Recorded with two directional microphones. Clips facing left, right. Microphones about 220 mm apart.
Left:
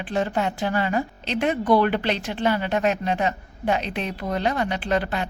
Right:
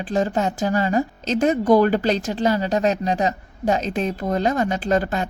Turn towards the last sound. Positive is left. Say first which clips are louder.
# right 3 dB
turn(degrees=-45)  # may be behind; listen again after turning